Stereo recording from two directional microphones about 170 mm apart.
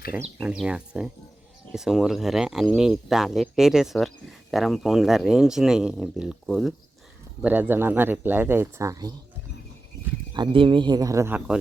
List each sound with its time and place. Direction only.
0.3 s speech: 5° right (ahead or behind); by 9.1 s 20° right (ahead or behind)
10.3 s speech: 30° right (ahead or behind); by 11.5 s 10° right (ahead or behind)